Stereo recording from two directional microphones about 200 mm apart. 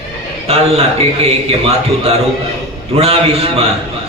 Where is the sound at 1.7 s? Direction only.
30° right (ahead or behind).